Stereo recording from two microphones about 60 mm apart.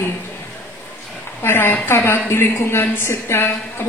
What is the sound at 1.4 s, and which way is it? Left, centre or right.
A woman's voice, left.